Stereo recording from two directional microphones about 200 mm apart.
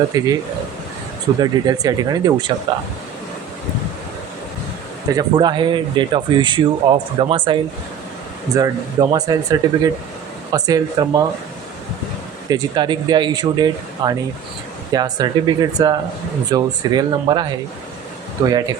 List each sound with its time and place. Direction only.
0.1 s speech: 20° right (ahead or behind)
1.4 s speech: 20° right (ahead or behind)
5.1 s speech: 20° right (ahead or behind)
12.5 s speech: 20° right (ahead or behind)